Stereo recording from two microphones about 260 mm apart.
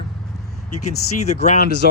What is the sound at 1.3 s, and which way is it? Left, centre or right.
Speech, left.